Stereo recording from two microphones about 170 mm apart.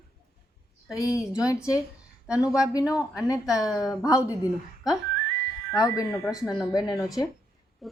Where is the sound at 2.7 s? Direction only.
20° left (ahead or behind).